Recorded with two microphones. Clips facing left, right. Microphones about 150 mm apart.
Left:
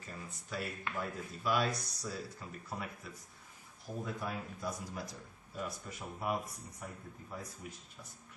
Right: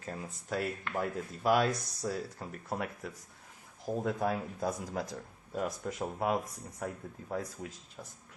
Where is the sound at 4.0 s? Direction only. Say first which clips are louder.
Right 7 dB; 90° right.